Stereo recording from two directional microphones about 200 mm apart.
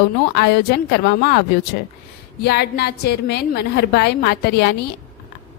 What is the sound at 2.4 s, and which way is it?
A woman's voice, 55° left (ahead or behind).